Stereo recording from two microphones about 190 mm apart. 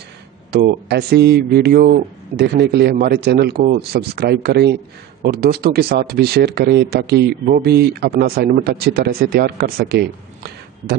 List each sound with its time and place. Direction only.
0.5 s speech: 55° right (ahead or behind)